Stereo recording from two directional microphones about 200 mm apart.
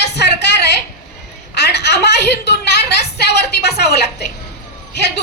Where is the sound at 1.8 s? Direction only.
55° left (ahead or behind).